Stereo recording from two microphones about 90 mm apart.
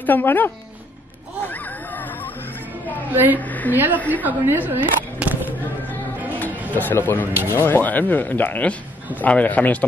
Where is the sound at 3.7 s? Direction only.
20° right (ahead or behind).